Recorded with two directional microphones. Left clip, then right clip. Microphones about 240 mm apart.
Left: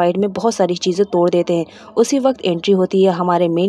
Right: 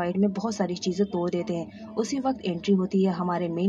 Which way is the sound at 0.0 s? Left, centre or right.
Left.